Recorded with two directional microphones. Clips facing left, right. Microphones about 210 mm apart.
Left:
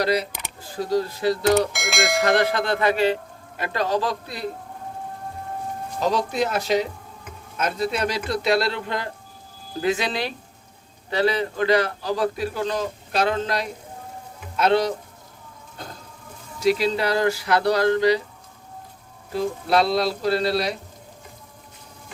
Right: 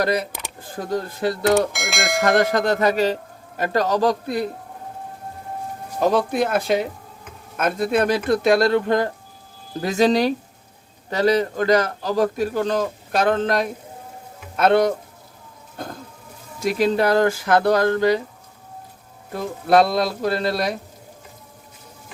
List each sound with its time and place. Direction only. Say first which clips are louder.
0.0 s a man's voice: right 1 dB; 50° right (ahead or behind)
1.5 s speech: right 1 dB; centre (ahead or behind)
2.2 s a man's voice: right 5 dB; 45° right (ahead or behind)
6.0 s a man's voice: right 4 dB; 55° right (ahead or behind)
16.6 s a man's voice: right 1 dB; 50° right (ahead or behind)
19.3 s a man's voice: right 3 dB; 50° right (ahead or behind)